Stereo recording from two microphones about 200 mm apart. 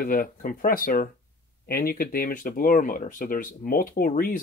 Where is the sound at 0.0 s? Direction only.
45° left (ahead or behind).